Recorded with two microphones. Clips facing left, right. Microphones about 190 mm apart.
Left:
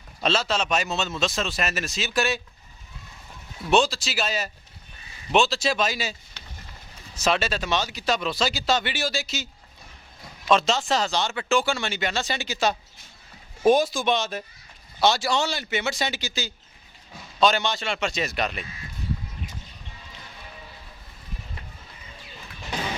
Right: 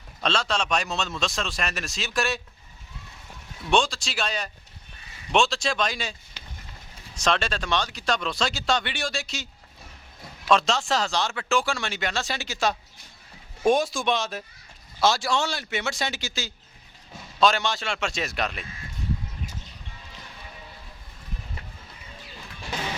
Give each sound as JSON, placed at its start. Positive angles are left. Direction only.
{"t": 0.2, "sound": "speech", "side_deg": 5}
{"t": 3.7, "sound": "speech", "side_deg": 5}
{"t": 7.2, "sound": "speech", "side_deg": 5}